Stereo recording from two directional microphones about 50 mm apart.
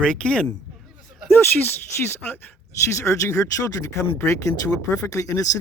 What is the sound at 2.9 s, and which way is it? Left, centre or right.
Speech, left.